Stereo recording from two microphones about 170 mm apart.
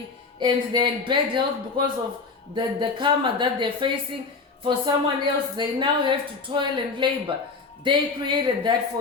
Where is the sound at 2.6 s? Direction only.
30° right (ahead or behind).